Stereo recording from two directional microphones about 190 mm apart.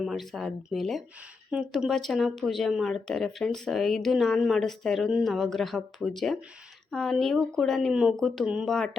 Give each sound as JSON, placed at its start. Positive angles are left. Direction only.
{"t": 0.0, "sound": "speech", "side_deg": 0}